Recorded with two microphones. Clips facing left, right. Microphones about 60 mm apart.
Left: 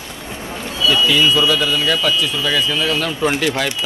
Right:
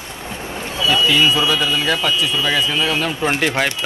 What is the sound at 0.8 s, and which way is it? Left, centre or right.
Speech, right.